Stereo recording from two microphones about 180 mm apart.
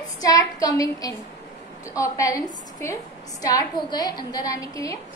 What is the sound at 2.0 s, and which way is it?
A woman's voice, 20° left (ahead or behind).